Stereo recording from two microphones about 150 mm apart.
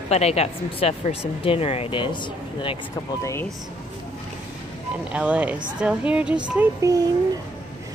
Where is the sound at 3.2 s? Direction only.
20° left (ahead or behind).